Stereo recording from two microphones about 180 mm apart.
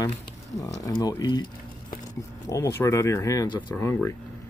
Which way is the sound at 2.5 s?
15° left (ahead or behind).